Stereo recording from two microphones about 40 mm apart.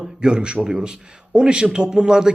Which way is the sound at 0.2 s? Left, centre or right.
Right.